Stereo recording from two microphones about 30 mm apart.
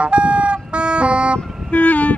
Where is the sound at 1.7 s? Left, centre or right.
Left.